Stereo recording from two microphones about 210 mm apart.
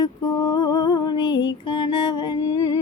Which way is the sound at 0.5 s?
15° left (ahead or behind).